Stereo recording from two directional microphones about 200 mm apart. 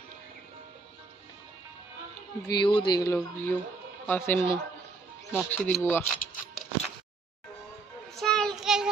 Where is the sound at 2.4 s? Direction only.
20° left (ahead or behind).